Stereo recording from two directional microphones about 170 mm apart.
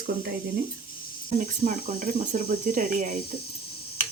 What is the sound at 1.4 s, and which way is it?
Speech, 45° right (ahead or behind).